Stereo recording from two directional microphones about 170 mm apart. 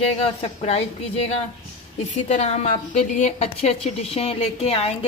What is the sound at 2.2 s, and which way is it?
A woman's voice, 40° left (ahead or behind).